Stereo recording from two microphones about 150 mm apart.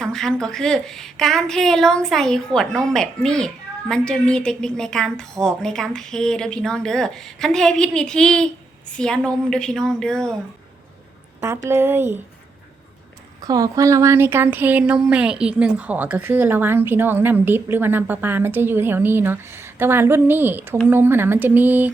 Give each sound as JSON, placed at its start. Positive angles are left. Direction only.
{"t": 0.0, "sound": "a woman's voice", "side_deg": 5}
{"t": 11.3, "sound": "a woman's voice", "side_deg": -15}
{"t": 13.4, "sound": "speech", "side_deg": -25}